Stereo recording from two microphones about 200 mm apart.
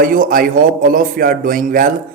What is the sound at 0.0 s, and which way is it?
Speech, 45° right (ahead or behind).